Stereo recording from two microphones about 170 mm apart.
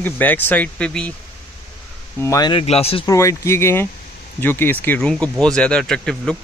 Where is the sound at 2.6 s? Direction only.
35° left (ahead or behind).